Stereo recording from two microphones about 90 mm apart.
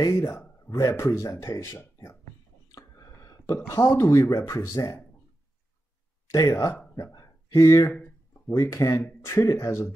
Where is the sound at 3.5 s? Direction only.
30° left (ahead or behind).